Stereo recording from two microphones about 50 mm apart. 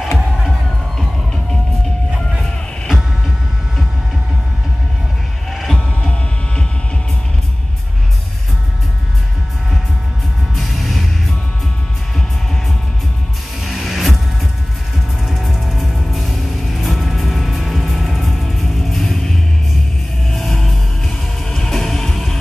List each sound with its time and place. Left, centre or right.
0.9 s music: centre
2.9 s vehicle: centre
5.5 s heart sounds: centre
5.8 s a sound: centre
10.5 s music: centre
13.6 s power windows: centre
15.2 s music: centre